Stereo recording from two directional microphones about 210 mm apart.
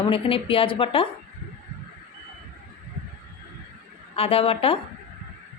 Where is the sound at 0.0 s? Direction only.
25° left (ahead or behind).